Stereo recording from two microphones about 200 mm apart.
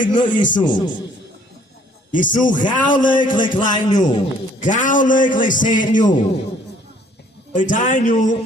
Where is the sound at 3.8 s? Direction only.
40° left (ahead or behind).